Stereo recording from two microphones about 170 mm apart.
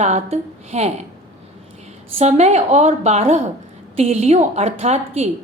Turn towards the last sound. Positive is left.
turn(degrees=-40)  # may be behind; listen again after turning